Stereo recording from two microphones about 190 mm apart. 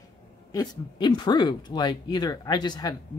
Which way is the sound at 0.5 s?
25° left (ahead or behind).